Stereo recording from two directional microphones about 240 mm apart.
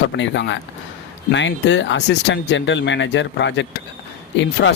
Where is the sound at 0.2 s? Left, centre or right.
Left.